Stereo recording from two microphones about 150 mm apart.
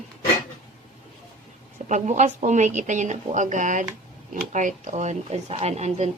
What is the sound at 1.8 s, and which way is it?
Speech, 50° right (ahead or behind).